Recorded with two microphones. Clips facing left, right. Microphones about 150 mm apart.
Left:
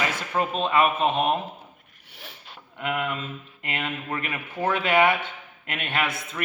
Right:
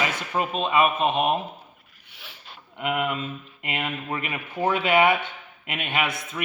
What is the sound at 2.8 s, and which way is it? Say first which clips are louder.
A man's voice: right 2 dB; 15° right (ahead or behind).